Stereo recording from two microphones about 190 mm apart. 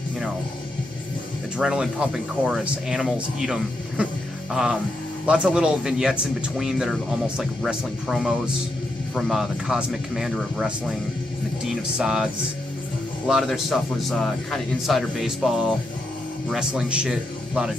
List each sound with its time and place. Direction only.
1.6 s speech: 5° right (ahead or behind)
12.0 s speech: 5° right (ahead or behind)
13.3 s a man's voice: centre (ahead or behind)